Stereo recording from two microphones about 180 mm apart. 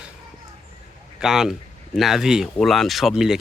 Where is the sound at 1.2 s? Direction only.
5° right (ahead or behind).